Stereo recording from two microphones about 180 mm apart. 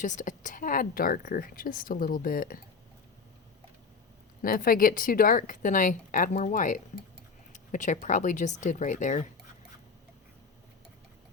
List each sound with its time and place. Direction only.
0.0 s a woman's voice: 45° left (ahead or behind)
4.4 s a woman's voice: 50° left (ahead or behind)